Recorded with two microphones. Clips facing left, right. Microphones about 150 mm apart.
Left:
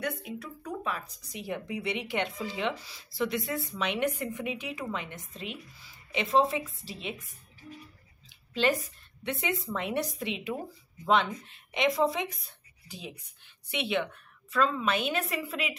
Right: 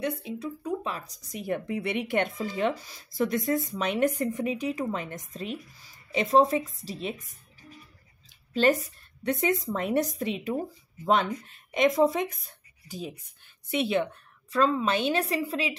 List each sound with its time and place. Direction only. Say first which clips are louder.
0.0 s speech: right 4 dB; 25° right (ahead or behind)
9.2 s speech: right 6 dB; 40° right (ahead or behind)